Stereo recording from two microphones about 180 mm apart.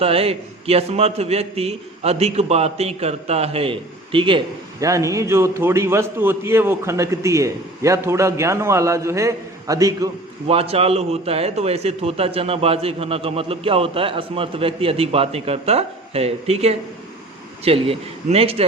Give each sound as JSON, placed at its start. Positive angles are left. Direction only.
{"t": 0.0, "sound": "a man's voice", "side_deg": -30}
{"t": 10.5, "sound": "a man's voice", "side_deg": -35}